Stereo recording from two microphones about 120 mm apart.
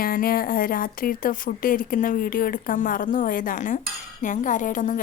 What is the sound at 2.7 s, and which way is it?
A woman's voice, 90° left.